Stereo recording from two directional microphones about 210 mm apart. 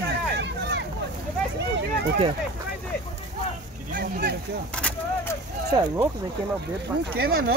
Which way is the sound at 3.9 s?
45° right (ahead or behind).